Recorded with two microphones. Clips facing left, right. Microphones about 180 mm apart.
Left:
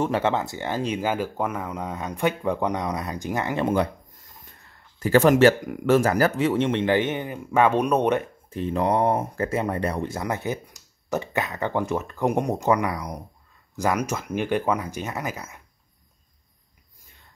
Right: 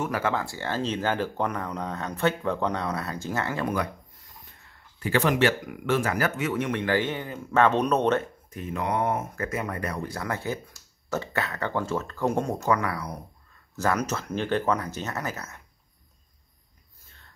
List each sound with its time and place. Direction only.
0.0 s speech: 25° left (ahead or behind)
4.9 s speech: 40° left (ahead or behind); by 8.3 s 15° left (ahead or behind)
8.5 s speech: 30° left (ahead or behind); by 15.6 s 10° left (ahead or behind)
17.0 s whispering: 15° left (ahead or behind)